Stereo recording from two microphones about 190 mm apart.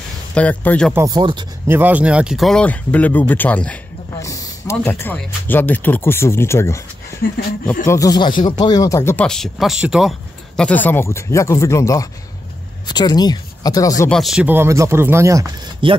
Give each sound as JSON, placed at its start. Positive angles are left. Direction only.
{"t": 0.3, "sound": "speech", "side_deg": 5}
{"t": 0.9, "sound": "speech", "side_deg": -20}
{"t": 1.7, "sound": "speech", "side_deg": -10}
{"t": 7.2, "sound": "speech", "side_deg": 50}
{"t": 7.8, "sound": "speech", "side_deg": 15}
{"t": 14.1, "sound": "speech", "side_deg": 0}
{"t": 15.8, "sound": "speech", "side_deg": -25}